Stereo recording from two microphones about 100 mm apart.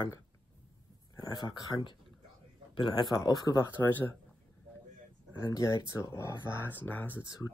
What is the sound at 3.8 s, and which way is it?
Speech, 30° left (ahead or behind).